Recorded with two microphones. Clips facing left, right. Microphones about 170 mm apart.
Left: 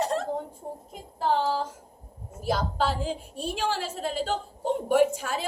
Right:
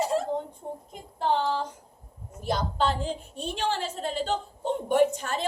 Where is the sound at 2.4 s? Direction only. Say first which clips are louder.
Even; 5° left (ahead or behind).